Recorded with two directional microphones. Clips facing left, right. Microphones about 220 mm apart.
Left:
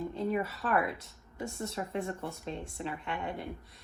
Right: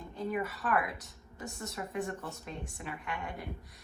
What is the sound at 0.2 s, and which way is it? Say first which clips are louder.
A woman's voice: left 1 dB; 25° left (ahead or behind).